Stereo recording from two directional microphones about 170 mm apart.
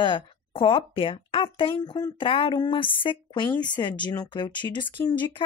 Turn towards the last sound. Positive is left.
turn(degrees=25)  # may be behind; listen again after turning